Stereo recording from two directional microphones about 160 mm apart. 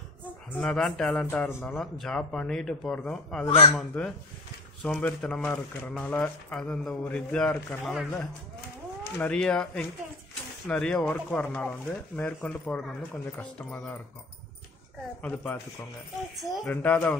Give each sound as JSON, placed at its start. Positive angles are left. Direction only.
{"t": 0.5, "sound": "speech", "side_deg": 5}
{"t": 3.4, "sound": "a man's voice", "side_deg": 35}
{"t": 3.7, "sound": "speech", "side_deg": 5}
{"t": 9.2, "sound": "speech", "side_deg": 5}
{"t": 15.2, "sound": "speech", "side_deg": 10}
{"t": 16.6, "sound": "speech", "side_deg": 10}